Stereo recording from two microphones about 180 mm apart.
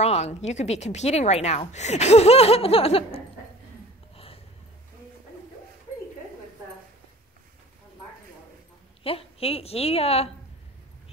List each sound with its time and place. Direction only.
0.0 s a woman's voice: 40° left (ahead or behind)
9.0 s a woman's voice: 30° left (ahead or behind)